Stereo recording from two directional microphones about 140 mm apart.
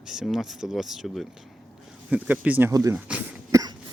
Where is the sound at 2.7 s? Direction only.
20° right (ahead or behind).